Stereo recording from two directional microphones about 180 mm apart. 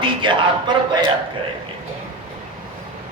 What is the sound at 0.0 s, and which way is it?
Speech, 25° right (ahead or behind).